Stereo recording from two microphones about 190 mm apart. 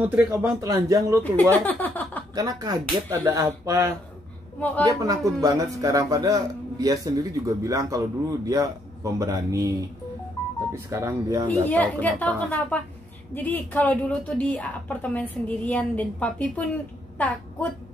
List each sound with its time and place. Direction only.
0.0 s a man's voice: 10° right (ahead or behind)
1.2 s speech: 10° left (ahead or behind)
2.3 s a man's voice: 20° right (ahead or behind)
4.6 s a woman's voice: 10° left (ahead or behind)
4.8 s a man's voice: 20° right (ahead or behind)
11.4 s a woman's voice: 10° left (ahead or behind)